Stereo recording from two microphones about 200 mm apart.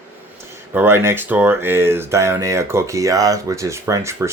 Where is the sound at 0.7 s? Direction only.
10° right (ahead or behind).